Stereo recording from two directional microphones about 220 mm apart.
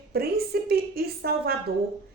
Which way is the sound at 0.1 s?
45° right (ahead or behind).